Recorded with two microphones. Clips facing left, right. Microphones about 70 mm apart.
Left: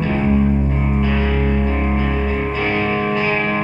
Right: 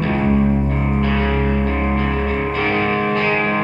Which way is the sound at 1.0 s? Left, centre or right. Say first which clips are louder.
Right 1 dB; right.